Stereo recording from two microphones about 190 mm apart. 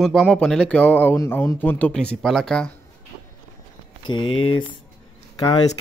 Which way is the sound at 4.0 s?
25° left (ahead or behind).